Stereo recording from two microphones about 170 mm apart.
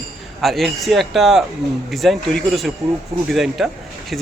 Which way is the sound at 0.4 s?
Centre (ahead or behind).